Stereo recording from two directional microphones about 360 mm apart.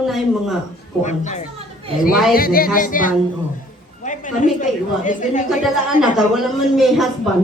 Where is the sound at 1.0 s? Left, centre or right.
Centre.